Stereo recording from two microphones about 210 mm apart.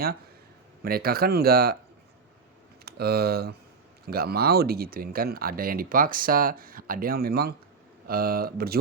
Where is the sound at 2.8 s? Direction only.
50° right (ahead or behind).